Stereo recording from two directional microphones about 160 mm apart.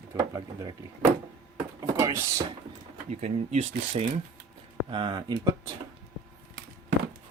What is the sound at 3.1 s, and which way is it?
Speech, 45° right (ahead or behind).